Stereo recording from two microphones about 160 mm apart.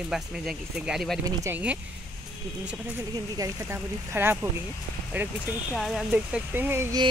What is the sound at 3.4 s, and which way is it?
Speech, 20° right (ahead or behind).